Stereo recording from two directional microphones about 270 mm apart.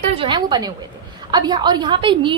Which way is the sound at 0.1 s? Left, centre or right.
Centre.